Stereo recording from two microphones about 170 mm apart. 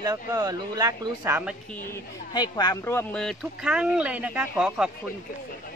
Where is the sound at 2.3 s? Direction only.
25° left (ahead or behind).